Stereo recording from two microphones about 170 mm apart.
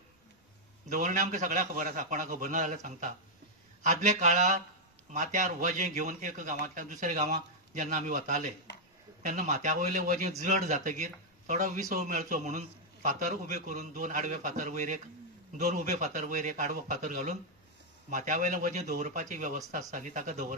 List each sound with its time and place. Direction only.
0.8 s a man's voice: 50° right (ahead or behind)